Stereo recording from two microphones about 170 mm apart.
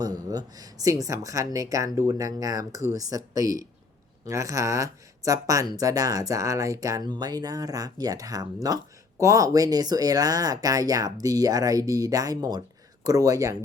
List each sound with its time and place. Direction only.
0.0 s speech: 20° right (ahead or behind)